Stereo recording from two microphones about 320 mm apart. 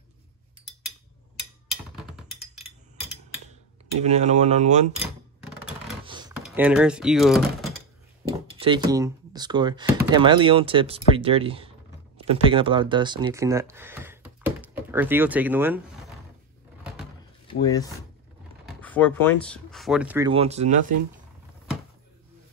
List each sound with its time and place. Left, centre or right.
4.0 s cutlery: right
4.9 s a sound: centre
6.0 s computer keyboard: centre
6.4 s speech: centre
8.5 s speech: centre
17.5 s speech: centre